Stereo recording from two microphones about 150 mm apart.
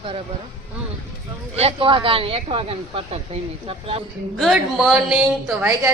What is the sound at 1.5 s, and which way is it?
Speech, 40° right (ahead or behind).